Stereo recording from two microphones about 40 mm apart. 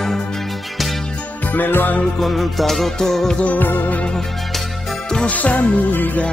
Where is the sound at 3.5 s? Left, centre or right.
Left.